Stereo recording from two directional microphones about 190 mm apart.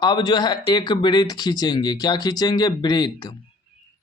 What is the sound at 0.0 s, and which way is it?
Speech, 20° left (ahead or behind).